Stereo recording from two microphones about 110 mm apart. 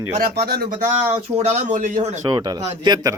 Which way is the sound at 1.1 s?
80° right.